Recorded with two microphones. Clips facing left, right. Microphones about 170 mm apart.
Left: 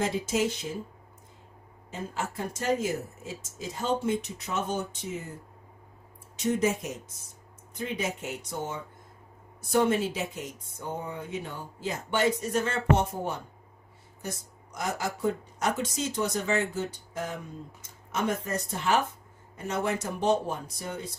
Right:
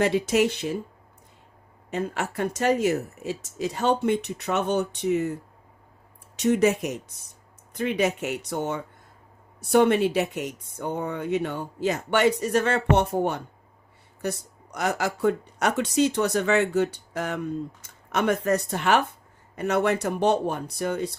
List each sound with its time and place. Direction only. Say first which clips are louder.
0.0 s speech: right 6 dB; 70° right (ahead or behind)
1.9 s speech: right 6 dB; 70° right (ahead or behind)
6.3 s speech: right 6 dB; 75° right (ahead or behind)